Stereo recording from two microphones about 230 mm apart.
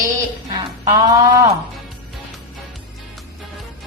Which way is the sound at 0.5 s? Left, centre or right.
Centre.